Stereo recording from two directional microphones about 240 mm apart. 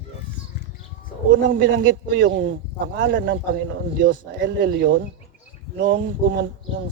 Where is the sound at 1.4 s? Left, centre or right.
Right.